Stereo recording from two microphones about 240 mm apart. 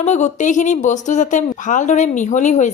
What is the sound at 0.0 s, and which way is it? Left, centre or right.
A woman's voice, left.